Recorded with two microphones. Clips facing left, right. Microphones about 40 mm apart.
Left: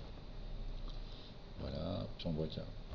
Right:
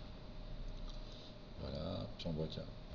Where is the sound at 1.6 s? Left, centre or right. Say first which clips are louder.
Left 2 dB; centre.